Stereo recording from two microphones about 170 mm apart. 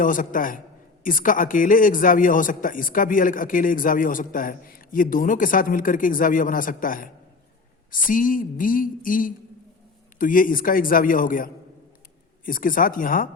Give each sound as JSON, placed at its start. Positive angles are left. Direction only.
{"t": 0.0, "sound": "a man's voice", "side_deg": 50}